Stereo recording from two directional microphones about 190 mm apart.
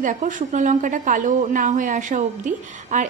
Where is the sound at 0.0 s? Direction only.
45° right (ahead or behind).